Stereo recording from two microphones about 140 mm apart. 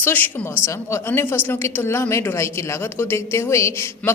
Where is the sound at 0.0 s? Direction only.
15° left (ahead or behind).